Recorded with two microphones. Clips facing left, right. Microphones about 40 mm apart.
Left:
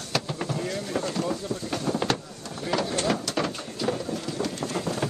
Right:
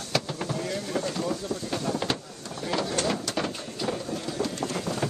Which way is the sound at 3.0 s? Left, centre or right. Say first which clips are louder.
Left 2 dB; left.